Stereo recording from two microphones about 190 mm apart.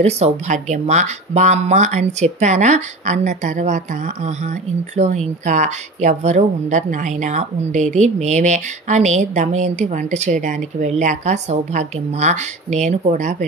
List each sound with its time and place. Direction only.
0.0 s speech: 40° right (ahead or behind)